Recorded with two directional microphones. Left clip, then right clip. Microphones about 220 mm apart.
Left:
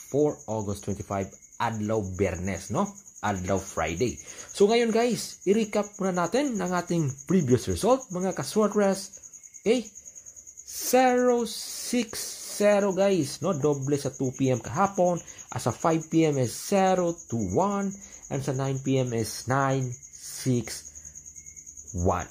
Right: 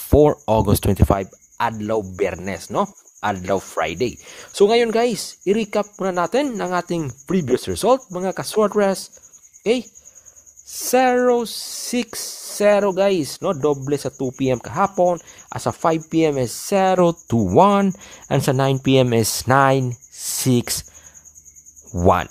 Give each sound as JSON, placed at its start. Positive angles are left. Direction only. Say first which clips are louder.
{"t": 0.1, "sound": "speech", "louder": "right 12 dB", "side_deg": -40}
{"t": 9.6, "sound": "a sound", "louder": "right 5 dB", "side_deg": -35}
{"t": 10.8, "sound": "speech", "louder": "right 5 dB", "side_deg": -35}
{"t": 21.9, "sound": "speech", "louder": "right 11 dB", "side_deg": -35}